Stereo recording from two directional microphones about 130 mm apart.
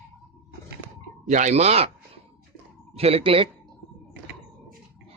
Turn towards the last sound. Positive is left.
turn(degrees=-45)  # may be behind; listen again after turning